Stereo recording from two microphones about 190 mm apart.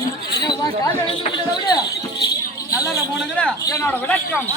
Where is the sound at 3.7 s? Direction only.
10° left (ahead or behind).